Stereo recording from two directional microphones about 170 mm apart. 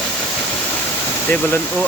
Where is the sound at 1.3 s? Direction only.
10° left (ahead or behind).